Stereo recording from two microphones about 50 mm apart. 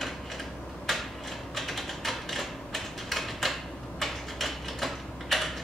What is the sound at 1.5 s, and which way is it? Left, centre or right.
Mechanisms, centre.